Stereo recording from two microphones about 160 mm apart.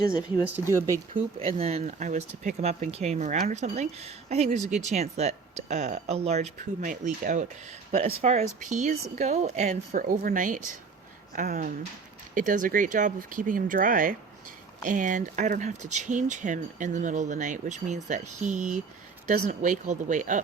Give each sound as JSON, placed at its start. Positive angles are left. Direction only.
{"t": 0.7, "sound": "speech", "side_deg": -15}
{"t": 1.4, "sound": "speech", "side_deg": -40}
{"t": 7.9, "sound": "speech", "side_deg": -45}
{"t": 9.9, "sound": "speech", "side_deg": -60}